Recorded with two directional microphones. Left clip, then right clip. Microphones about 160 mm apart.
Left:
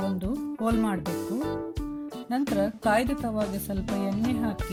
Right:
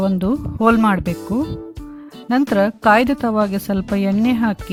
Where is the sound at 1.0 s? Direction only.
Centre (ahead or behind).